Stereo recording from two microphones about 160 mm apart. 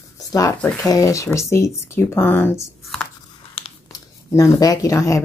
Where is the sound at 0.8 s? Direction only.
20° left (ahead or behind).